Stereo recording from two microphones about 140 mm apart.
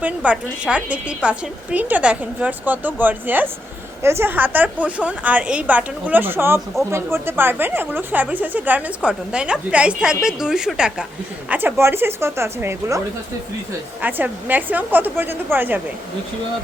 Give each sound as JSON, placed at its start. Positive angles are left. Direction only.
{"t": 0.0, "sound": "a woman's voice", "side_deg": -10}
{"t": 14.0, "sound": "speech", "side_deg": -15}